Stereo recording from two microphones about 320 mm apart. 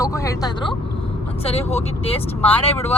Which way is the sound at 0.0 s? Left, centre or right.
Centre.